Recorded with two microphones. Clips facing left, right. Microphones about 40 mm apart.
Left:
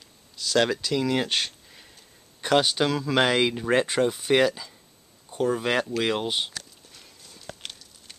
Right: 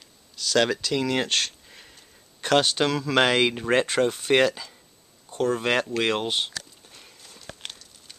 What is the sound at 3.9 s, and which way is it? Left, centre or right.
Speech, centre.